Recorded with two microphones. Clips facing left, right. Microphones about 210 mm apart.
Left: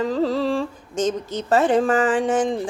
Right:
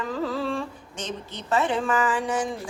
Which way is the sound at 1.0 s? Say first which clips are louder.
Left 7 dB; 45° left (ahead or behind).